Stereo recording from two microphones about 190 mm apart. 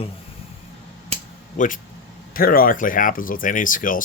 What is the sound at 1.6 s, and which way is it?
Speech, 40° left (ahead or behind).